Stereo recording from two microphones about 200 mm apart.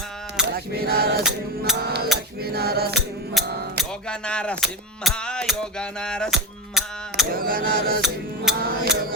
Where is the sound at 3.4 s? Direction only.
Centre (ahead or behind).